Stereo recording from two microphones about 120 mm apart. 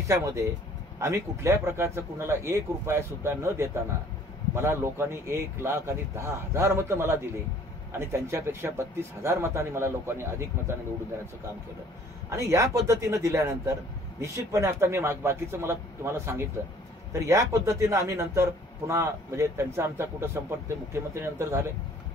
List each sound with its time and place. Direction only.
0.1 s a man's voice: 25° right (ahead or behind)
12.3 s a man's voice: 25° right (ahead or behind)